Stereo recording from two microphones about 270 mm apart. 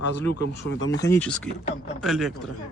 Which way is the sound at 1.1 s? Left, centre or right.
Centre.